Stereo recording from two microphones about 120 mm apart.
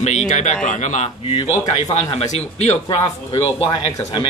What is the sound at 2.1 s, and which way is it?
Speech, 70° left (ahead or behind).